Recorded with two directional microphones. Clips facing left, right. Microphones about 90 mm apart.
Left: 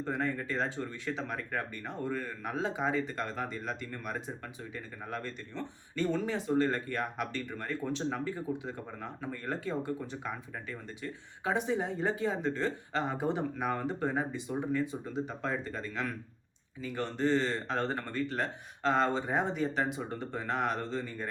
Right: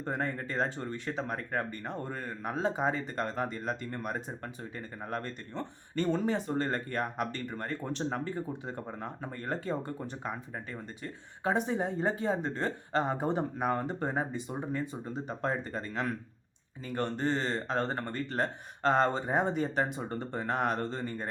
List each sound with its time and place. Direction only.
0.0 s speech: 40° right (ahead or behind)